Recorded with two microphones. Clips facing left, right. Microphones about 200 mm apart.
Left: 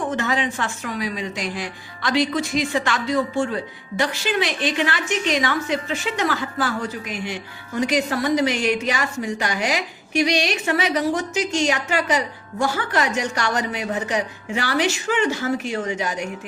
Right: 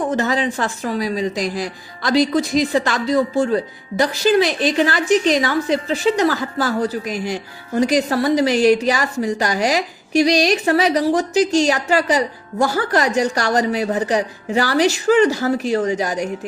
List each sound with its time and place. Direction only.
0.1 s a woman's voice: 35° right (ahead or behind)